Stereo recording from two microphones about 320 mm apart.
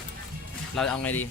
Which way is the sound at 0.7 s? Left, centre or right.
Centre.